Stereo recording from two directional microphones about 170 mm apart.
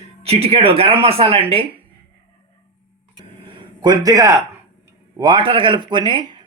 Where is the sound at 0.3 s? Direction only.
35° right (ahead or behind).